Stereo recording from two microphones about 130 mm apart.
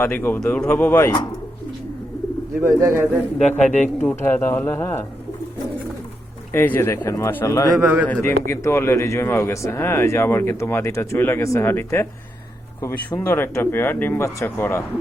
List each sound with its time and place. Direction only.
0.0 s speech: 15° left (ahead or behind)
2.6 s speech: 20° right (ahead or behind)
3.6 s speech: 65° left (ahead or behind)
4.1 s speech: 20° left (ahead or behind)
6.5 s a man's voice: 20° left (ahead or behind)
7.8 s speech: 10° right (ahead or behind)
8.0 s a man's voice: 15° left (ahead or behind)